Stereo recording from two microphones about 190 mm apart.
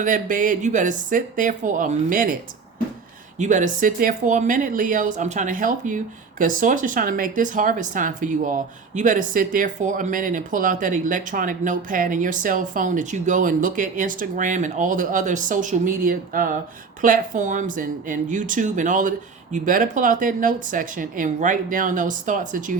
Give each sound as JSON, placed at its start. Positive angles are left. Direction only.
{"t": 0.0, "sound": "speech", "side_deg": -45}